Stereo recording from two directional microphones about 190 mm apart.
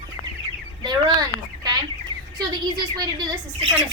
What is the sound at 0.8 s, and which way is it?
Speech, 20° right (ahead or behind).